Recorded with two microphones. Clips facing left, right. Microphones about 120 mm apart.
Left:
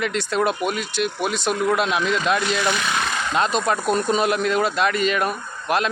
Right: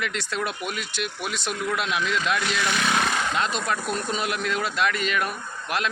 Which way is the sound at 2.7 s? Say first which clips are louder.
Left 2 dB; 5° left (ahead or behind).